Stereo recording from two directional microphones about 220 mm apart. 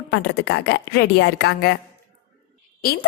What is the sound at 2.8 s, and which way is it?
Speech, 45° left (ahead or behind).